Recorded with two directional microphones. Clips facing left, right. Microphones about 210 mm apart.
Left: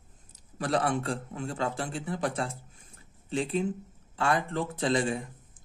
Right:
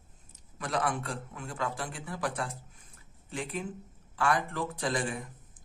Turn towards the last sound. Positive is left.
turn(degrees=25)  # may be behind; listen again after turning